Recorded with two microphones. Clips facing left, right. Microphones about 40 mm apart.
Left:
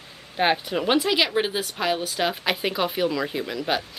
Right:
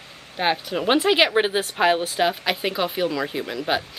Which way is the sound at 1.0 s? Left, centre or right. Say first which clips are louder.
Right 4 dB; right.